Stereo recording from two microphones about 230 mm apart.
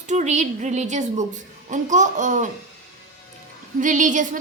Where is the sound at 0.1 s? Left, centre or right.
Right.